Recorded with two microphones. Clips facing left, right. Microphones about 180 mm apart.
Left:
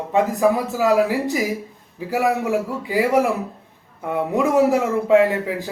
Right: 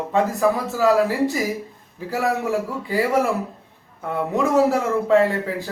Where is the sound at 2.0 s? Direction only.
15° left (ahead or behind).